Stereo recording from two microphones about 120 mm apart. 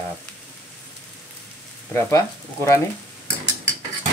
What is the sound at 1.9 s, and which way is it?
Speech, 20° left (ahead or behind).